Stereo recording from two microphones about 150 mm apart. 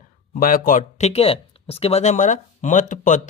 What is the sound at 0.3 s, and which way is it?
Speech, 65° left (ahead or behind).